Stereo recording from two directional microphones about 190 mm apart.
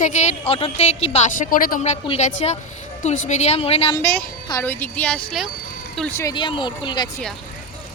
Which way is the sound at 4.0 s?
15° left (ahead or behind).